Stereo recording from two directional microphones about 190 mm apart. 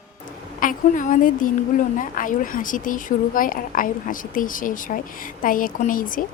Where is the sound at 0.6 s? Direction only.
45° left (ahead or behind).